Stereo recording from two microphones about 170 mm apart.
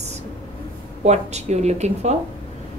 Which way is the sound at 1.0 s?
40° right (ahead or behind).